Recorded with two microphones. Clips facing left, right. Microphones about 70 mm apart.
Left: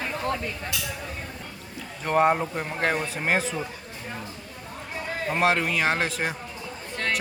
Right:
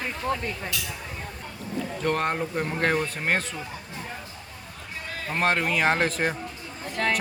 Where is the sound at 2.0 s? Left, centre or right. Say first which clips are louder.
Left 5 dB; centre.